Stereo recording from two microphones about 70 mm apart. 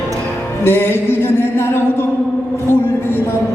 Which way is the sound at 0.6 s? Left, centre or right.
Left.